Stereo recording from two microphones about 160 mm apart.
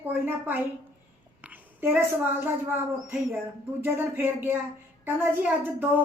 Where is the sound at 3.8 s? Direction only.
15° right (ahead or behind).